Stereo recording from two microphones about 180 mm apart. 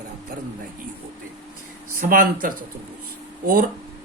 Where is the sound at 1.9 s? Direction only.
50° right (ahead or behind).